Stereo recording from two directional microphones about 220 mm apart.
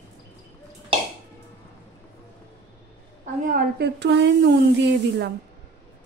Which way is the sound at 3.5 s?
45° right (ahead or behind).